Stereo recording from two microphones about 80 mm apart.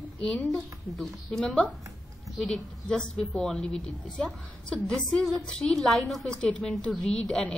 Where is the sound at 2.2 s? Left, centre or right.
Centre.